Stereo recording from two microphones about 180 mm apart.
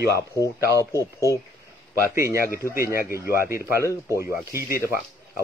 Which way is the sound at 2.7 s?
15° right (ahead or behind).